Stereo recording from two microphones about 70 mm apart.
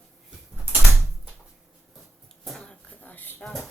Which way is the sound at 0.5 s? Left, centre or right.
Right.